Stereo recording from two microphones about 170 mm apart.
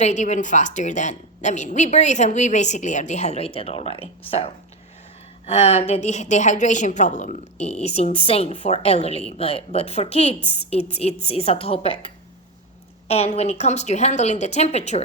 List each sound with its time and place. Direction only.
0.0 s a woman's voice: 45° left (ahead or behind)